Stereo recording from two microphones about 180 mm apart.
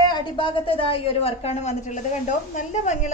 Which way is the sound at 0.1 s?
25° left (ahead or behind).